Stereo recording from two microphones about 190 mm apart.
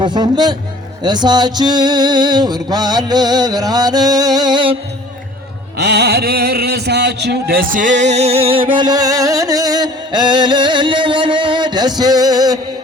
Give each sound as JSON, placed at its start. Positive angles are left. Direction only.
{"t": 0.0, "sound": "music", "side_deg": -20}
{"t": 5.7, "sound": "music", "side_deg": -60}